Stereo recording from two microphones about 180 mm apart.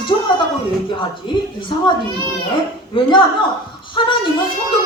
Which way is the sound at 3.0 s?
25° left (ahead or behind).